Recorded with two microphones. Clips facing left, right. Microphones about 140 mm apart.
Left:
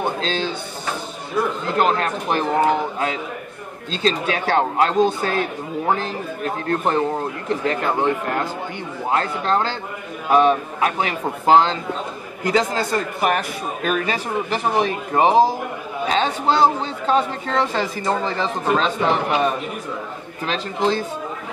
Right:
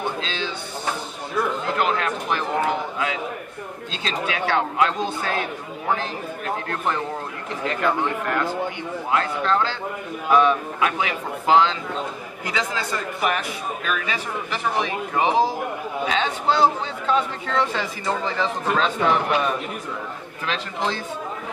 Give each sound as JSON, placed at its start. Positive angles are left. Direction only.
{"t": 0.0, "sound": "a sound", "side_deg": 40}
{"t": 1.8, "sound": "speech", "side_deg": 40}
{"t": 3.9, "sound": "speech", "side_deg": 35}